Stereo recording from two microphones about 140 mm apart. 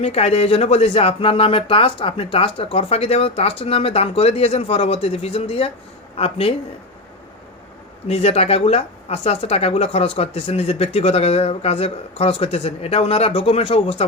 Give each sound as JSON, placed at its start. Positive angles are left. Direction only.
{"t": 0.0, "sound": "a woman's voice", "side_deg": 45}
{"t": 8.0, "sound": "a woman's voice", "side_deg": 45}